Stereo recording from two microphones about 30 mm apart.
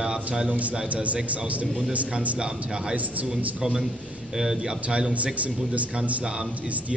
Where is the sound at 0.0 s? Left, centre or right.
Right.